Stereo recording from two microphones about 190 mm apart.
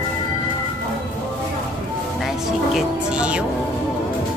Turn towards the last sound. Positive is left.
turn(degrees=-5)  # may be behind; listen again after turning